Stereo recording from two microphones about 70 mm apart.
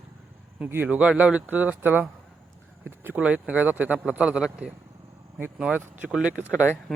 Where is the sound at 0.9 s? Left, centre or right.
Centre.